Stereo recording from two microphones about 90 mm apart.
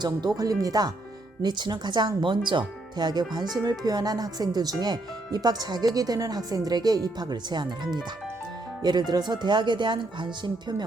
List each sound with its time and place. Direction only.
0.0 s speech: 50° right (ahead or behind)
8.8 s speech: 50° right (ahead or behind)